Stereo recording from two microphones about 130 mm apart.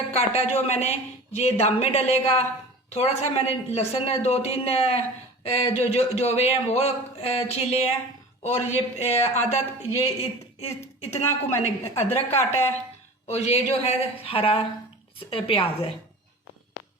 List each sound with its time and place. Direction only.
0.1 s a man's voice: 55° left (ahead or behind)
10.6 s speech: 55° left (ahead or behind)
11.1 s a woman's voice: 20° left (ahead or behind)
11.9 s a man's voice: 55° left (ahead or behind)